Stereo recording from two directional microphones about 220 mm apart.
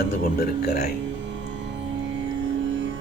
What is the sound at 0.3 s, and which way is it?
Speech, 45° left (ahead or behind).